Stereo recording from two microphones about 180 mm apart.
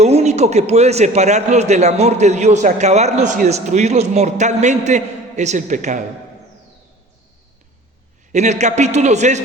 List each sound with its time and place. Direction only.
0.0 s a man's voice: 35° right (ahead or behind)
8.3 s a man's voice: 40° right (ahead or behind)